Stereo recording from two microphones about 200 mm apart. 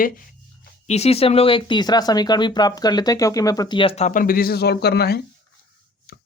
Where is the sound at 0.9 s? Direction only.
30° left (ahead or behind).